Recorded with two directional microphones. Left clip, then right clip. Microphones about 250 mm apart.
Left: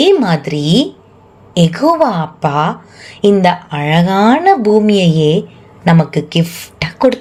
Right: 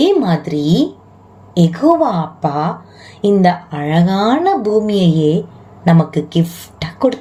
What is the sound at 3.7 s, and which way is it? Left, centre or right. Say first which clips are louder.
Speech: left 4 dB; left.